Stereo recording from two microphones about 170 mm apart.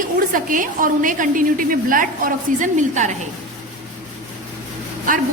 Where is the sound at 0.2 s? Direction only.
55° right (ahead or behind).